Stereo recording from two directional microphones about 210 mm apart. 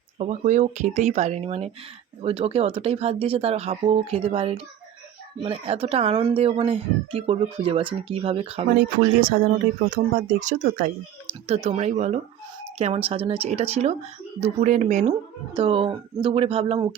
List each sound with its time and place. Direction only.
0.2 s speech: 35° right (ahead or behind)
8.8 s speech: 40° right (ahead or behind); by 16.8 s 25° right (ahead or behind)